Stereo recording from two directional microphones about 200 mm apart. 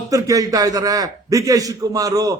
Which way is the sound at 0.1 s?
15° right (ahead or behind).